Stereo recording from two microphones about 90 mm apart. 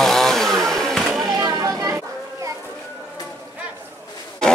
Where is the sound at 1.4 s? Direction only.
45° right (ahead or behind).